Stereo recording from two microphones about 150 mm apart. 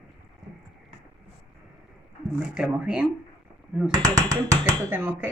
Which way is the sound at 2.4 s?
5° right (ahead or behind).